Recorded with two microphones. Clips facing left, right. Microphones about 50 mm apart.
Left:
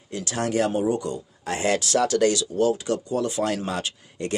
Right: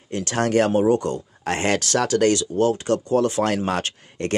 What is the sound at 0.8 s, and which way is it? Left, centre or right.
Speech, right.